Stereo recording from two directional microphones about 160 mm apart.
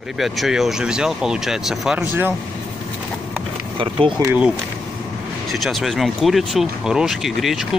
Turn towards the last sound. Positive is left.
turn(degrees=0)  # may be behind; listen again after turning